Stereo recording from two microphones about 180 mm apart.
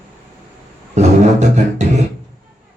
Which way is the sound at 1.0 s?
40° right (ahead or behind).